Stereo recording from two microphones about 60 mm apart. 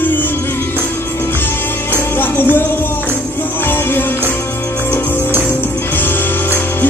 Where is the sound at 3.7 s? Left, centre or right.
Left.